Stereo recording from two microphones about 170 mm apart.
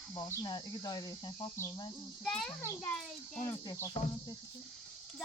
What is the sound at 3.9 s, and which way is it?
Speech, 30° left (ahead or behind).